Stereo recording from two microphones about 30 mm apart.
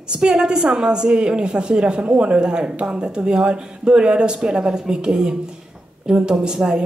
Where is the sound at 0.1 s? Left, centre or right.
Right.